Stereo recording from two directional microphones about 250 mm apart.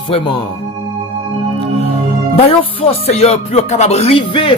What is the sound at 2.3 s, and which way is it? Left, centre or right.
Speech, left.